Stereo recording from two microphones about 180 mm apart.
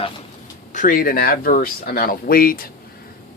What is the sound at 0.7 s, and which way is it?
Speech, 50° left (ahead or behind).